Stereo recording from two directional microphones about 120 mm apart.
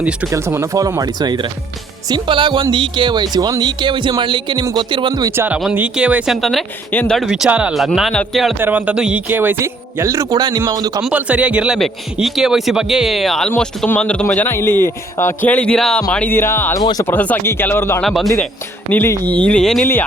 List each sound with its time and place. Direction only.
0.3 s a man's voice: 20° right (ahead or behind)
5.7 s speech: 10° right (ahead or behind)
6.9 s speech: 15° left (ahead or behind)
7.2 s speech: 5° right (ahead or behind)
8.5 s a man's voice: 15° right (ahead or behind); by 11.0 s 35° right (ahead or behind)
11.0 s speech: 10° right (ahead or behind); by 16.3 s 5° left (ahead or behind)
16.3 s speech: 20° left (ahead or behind)
16.7 s speech: 30° left (ahead or behind)
17.1 s speech: 15° left (ahead or behind)
18.0 s speech: centre (ahead or behind)
18.9 s speech: 20° left (ahead or behind)